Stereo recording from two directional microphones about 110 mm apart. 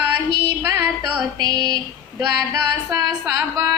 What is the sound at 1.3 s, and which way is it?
Speech, 35° right (ahead or behind).